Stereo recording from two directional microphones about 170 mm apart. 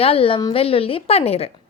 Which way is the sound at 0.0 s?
35° left (ahead or behind).